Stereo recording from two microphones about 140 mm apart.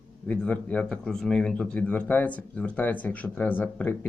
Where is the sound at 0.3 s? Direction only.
10° left (ahead or behind).